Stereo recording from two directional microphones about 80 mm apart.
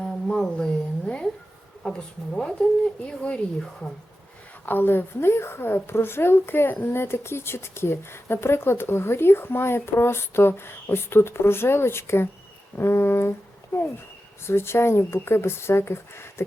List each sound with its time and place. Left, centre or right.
0.0 s a sound: centre
1.8 s speech: centre
4.6 s a woman's voice: left
14.4 s a woman's voice: left